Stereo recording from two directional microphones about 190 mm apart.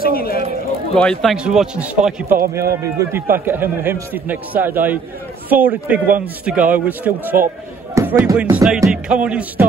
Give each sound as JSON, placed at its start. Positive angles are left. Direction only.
{"t": 0.0, "sound": "speech", "side_deg": 50}
{"t": 0.9, "sound": "a man's voice", "side_deg": 5}
{"t": 7.9, "sound": "basketball bounce", "side_deg": -15}
{"t": 8.4, "sound": "speech", "side_deg": -5}